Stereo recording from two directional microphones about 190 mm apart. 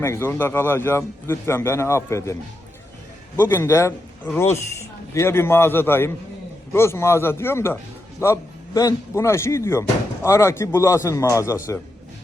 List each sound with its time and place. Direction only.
0.0 s a man's voice: 10° left (ahead or behind)
3.3 s a man's voice: 10° left (ahead or behind)